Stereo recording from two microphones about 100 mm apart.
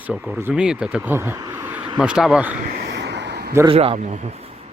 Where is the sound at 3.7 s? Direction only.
65° right (ahead or behind).